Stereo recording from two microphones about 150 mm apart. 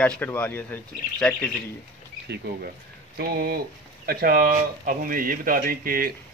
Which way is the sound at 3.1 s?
90° right.